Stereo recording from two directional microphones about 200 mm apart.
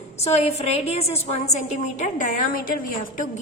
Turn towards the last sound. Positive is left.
turn(degrees=40)  # may be behind; listen again after turning